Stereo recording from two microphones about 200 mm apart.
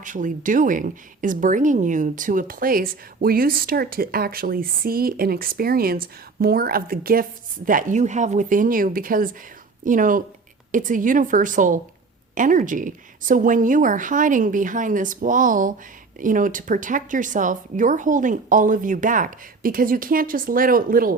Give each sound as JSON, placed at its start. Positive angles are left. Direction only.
{"t": 0.0, "sound": "a woman's voice", "side_deg": -40}